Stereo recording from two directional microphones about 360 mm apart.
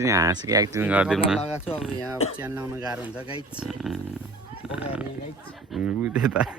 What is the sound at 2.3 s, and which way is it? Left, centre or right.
Speech, centre.